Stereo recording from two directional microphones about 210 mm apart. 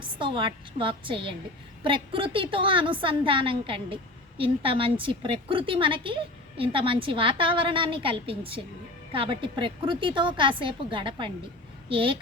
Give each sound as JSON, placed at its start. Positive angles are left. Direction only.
{"t": 0.0, "sound": "a woman's voice", "side_deg": -25}